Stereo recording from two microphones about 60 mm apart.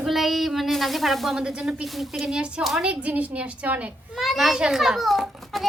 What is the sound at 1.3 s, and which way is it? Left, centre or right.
Speech, centre.